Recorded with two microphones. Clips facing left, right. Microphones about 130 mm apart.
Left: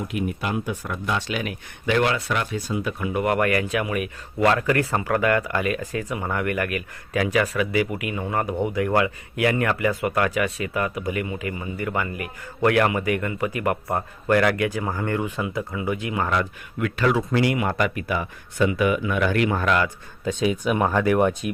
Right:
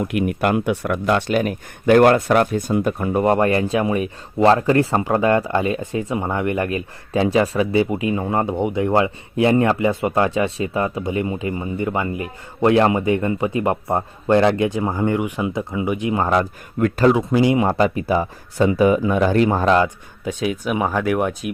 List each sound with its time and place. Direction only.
0.0 s speech: 60° right (ahead or behind)
1.3 s speech: 45° right (ahead or behind); by 16.1 s 20° right (ahead or behind)
16.1 s speech: 35° right (ahead or behind)
17.2 s speech: 20° right (ahead or behind)
17.6 s speech: 30° right (ahead or behind)
20.2 s speech: 5° right (ahead or behind)